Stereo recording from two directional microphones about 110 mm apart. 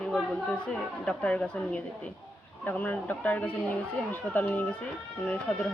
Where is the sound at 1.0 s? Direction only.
10° left (ahead or behind).